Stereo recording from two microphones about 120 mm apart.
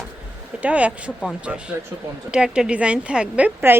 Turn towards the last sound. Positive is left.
turn(degrees=-15)  # may be behind; listen again after turning